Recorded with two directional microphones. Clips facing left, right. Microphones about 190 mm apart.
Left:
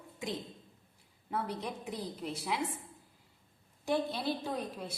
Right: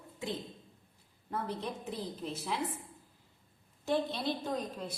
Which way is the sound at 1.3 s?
10° left (ahead or behind).